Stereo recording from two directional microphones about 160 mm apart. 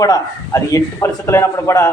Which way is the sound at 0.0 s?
20° left (ahead or behind).